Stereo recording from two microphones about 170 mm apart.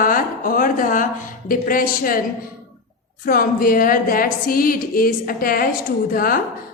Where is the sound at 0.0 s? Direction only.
55° left (ahead or behind).